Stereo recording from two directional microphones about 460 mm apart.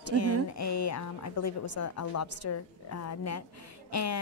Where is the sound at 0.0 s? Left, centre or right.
Left.